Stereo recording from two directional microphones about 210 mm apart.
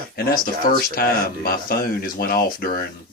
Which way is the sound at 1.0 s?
45° left (ahead or behind).